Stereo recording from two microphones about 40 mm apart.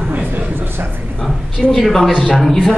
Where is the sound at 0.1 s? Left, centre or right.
Right.